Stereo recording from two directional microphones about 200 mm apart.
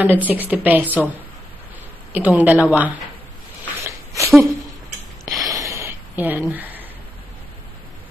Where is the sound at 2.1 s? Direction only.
10° right (ahead or behind).